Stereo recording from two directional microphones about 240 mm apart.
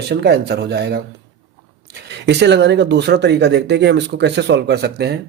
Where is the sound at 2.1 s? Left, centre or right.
Right.